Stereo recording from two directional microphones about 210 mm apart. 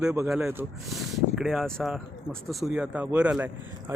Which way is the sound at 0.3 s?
5° right (ahead or behind).